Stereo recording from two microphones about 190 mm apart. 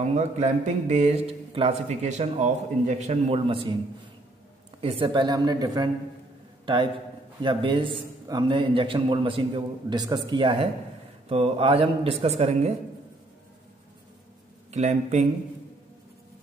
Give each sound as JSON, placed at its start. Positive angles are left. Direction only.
{"t": 0.0, "sound": "a man's voice", "side_deg": -35}
{"t": 4.8, "sound": "a man's voice", "side_deg": -30}
{"t": 14.7, "sound": "a man's voice", "side_deg": -35}